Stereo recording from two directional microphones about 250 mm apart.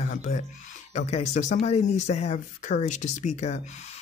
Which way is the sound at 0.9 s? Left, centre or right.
Left.